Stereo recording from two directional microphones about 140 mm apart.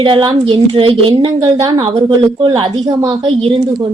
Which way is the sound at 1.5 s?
30° right (ahead or behind).